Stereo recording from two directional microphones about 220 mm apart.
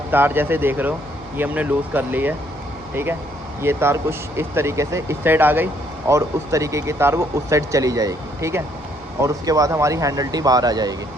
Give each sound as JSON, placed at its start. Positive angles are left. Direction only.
{"t": 0.1, "sound": "speech", "side_deg": -10}